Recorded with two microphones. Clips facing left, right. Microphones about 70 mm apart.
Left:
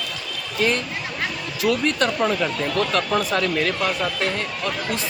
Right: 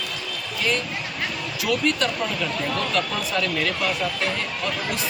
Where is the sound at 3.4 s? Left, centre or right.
Left.